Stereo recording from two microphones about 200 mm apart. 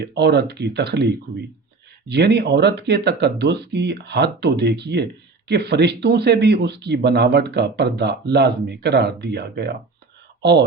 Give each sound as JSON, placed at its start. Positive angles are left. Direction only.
{"t": 0.0, "sound": "speech", "side_deg": -55}